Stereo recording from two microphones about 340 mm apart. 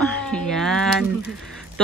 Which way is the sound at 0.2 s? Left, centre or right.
Centre.